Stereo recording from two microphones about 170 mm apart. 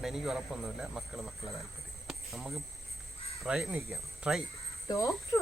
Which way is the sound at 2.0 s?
Centre (ahead or behind).